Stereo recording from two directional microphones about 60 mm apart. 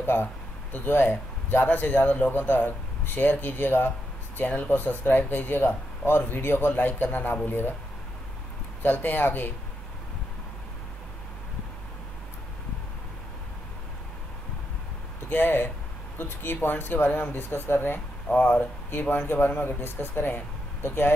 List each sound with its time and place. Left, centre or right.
0.0 s speech: left
8.8 s speech: left
15.2 s speech: left